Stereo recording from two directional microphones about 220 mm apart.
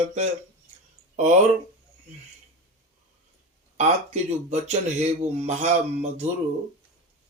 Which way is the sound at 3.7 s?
30° right (ahead or behind).